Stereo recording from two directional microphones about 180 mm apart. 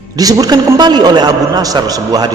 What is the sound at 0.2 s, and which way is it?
A man's voice, 20° right (ahead or behind).